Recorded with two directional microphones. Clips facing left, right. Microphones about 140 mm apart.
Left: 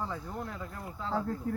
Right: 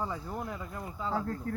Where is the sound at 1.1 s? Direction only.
5° left (ahead or behind).